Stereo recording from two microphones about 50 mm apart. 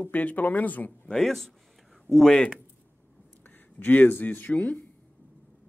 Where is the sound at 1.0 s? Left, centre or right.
Centre.